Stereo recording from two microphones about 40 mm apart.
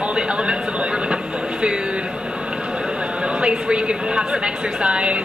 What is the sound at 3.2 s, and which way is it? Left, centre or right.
A woman's voice, right.